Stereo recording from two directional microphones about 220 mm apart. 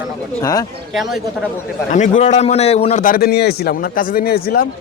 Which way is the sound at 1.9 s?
35° left (ahead or behind).